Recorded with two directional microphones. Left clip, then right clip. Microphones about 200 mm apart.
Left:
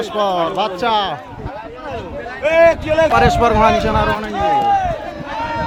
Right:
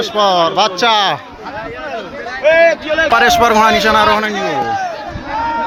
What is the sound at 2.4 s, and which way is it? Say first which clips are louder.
Speech: right 2 dB; 65° left (ahead or behind).